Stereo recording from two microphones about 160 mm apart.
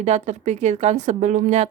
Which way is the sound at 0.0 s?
45° right (ahead or behind).